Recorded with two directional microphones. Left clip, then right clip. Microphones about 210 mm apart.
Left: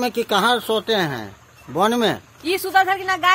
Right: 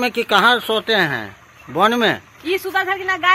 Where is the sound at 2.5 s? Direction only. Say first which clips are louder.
Left 2 dB; 55° left (ahead or behind).